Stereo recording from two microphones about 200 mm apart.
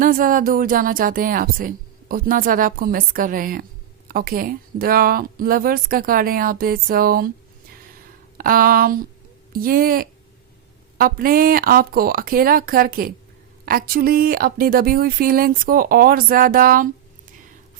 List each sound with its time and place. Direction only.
0.0 s a woman's voice: 45° right (ahead or behind)
8.4 s a woman's voice: 45° right (ahead or behind)